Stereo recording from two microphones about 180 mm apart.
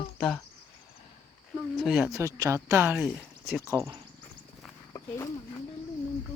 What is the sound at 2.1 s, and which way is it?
Speech, 20° right (ahead or behind).